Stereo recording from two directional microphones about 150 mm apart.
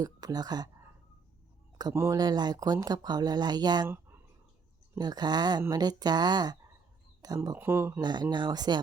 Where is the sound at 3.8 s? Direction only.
15° right (ahead or behind).